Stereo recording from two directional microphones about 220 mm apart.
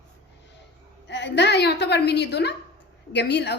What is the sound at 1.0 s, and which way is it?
A woman's voice, 50° left (ahead or behind).